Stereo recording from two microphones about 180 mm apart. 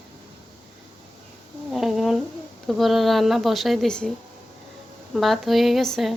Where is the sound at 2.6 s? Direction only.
Centre (ahead or behind).